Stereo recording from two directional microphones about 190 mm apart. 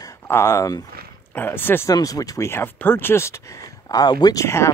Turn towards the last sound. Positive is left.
turn(degrees=15)  # may be behind; listen again after turning